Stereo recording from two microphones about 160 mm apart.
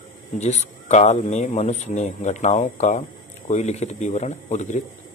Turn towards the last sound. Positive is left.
turn(degrees=45)  # may be behind; listen again after turning